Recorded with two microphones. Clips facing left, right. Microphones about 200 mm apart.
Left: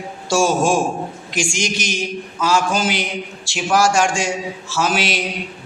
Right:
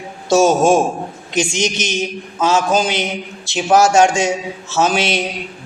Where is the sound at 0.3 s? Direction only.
20° right (ahead or behind).